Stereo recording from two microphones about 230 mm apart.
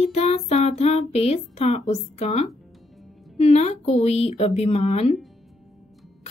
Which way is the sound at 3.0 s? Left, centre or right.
Centre.